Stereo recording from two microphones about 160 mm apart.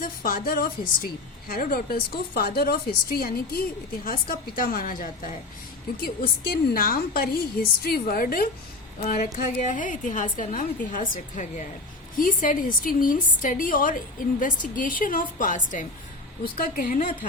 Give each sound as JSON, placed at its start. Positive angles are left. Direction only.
{"t": 0.0, "sound": "a woman's voice", "side_deg": 65}
{"t": 6.0, "sound": "a woman's voice", "side_deg": 70}
{"t": 9.0, "sound": "a woman's voice", "side_deg": 55}